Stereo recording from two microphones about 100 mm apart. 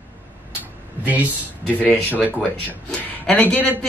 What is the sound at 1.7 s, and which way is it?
Speech, 15° left (ahead or behind).